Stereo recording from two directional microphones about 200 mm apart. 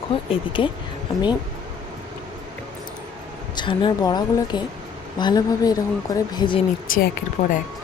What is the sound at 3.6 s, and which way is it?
A woman's voice, 25° left (ahead or behind).